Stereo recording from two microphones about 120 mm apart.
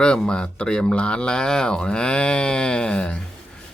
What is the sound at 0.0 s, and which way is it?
Speech, 5° left (ahead or behind).